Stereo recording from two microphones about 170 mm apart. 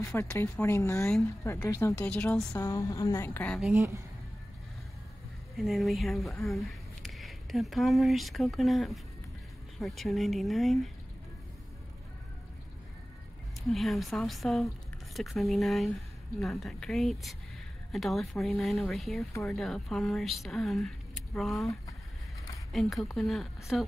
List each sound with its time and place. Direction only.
0.1 s speech: 15° left (ahead or behind)
2.6 s speech: 20° left (ahead or behind); by 3.7 s 5° left (ahead or behind)
3.7 s speech: 15° right (ahead or behind)
5.6 s speech: centre (ahead or behind)
13.7 s speech: centre (ahead or behind)
22.7 s speech: centre (ahead or behind)